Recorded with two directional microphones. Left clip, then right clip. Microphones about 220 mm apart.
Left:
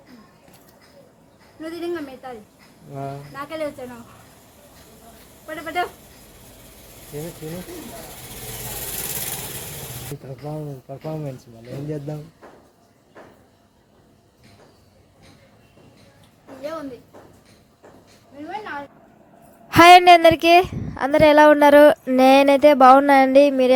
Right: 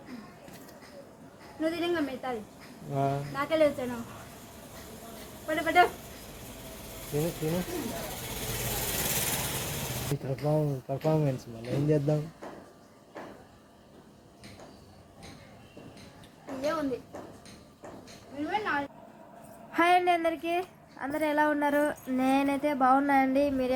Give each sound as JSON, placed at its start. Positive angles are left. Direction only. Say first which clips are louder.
{"t": 1.6, "sound": "speech", "louder": "left 1 dB", "side_deg": 5}
{"t": 2.9, "sound": "speech", "louder": "right 2 dB", "side_deg": -5}
{"t": 3.3, "sound": "speech", "louder": "right 3 dB", "side_deg": 10}
{"t": 5.5, "sound": "speech", "louder": "right 2 dB", "side_deg": 5}
{"t": 10.4, "sound": "speech", "louder": "right 4 dB", "side_deg": -5}
{"t": 18.4, "sound": "a sound", "louder": "right 1 dB", "side_deg": -5}
{"t": 19.7, "sound": "a woman's voice", "louder": "left 15 dB", "side_deg": 45}